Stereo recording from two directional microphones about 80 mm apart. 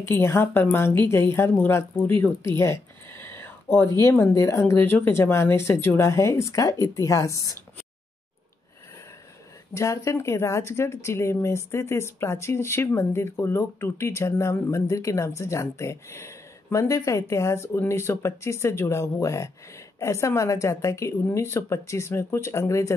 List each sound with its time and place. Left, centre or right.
0.0 s speech: left
9.8 s speech: left